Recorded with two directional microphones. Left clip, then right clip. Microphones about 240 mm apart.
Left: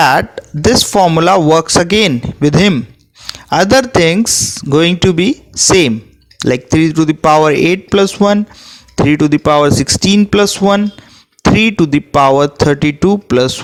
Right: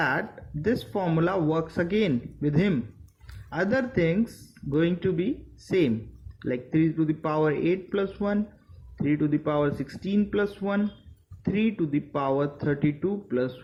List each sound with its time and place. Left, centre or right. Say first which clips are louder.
0.0 s speech: left 17 dB; left
6.4 s speech: left 14 dB; left